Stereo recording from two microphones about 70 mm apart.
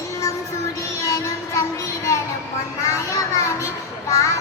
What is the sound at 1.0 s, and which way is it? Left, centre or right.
Music, left.